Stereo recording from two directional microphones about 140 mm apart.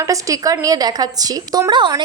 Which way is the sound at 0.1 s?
25° right (ahead or behind).